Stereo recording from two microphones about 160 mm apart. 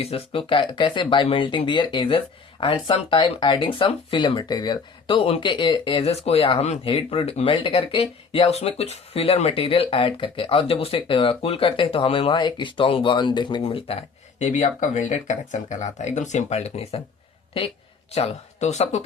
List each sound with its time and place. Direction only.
0.0 s speech: 35° left (ahead or behind)
18.1 s speech: 45° left (ahead or behind)